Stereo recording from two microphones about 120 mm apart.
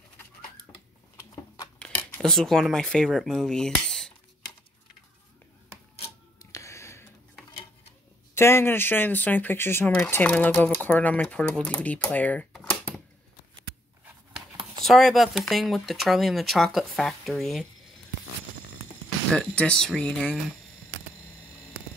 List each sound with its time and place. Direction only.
1.1 s a sound: 30° left (ahead or behind)
1.8 s speech: 10° left (ahead or behind)
6.5 s a sound: 25° left (ahead or behind)
8.4 s speech: 20° left (ahead or behind); by 13.0 s 5° left (ahead or behind)
14.9 s speech: centre (ahead or behind)
19.3 s speech: 10° left (ahead or behind)